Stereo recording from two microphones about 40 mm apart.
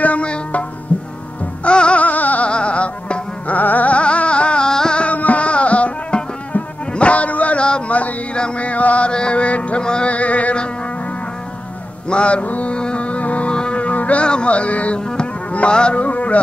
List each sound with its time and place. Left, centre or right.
0.0 s music: left
2.0 s music: left
2.4 s music: left
5.0 s music: left
8.4 s chant: left
9.1 s music: left
10.1 s music: left
12.1 s mantra: left
12.7 s music: left
15.0 s music: centre
15.7 s a man's voice: left